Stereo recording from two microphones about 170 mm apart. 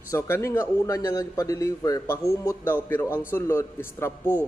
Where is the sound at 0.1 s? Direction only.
15° left (ahead or behind).